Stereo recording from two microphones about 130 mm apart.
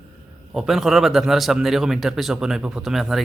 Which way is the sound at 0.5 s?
Centre (ahead or behind).